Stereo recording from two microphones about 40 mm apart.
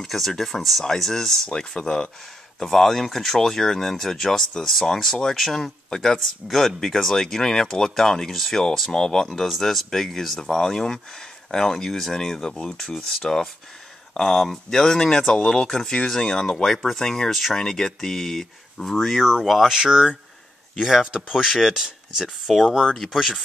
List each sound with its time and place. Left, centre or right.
0.0 s speech: centre
1.8 s speech: left
2.6 s speech: centre
17.6 s speech: centre
19.7 s speech: centre
22.6 s speech: centre
23.1 s speech: centre